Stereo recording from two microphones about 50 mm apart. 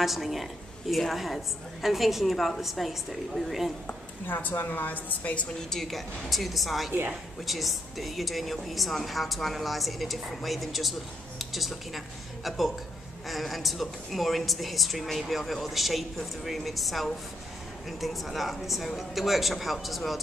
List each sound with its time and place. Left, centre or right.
0.0 s a woman's voice: centre
4.3 s a woman's voice: left
5.7 s a woman's voice: centre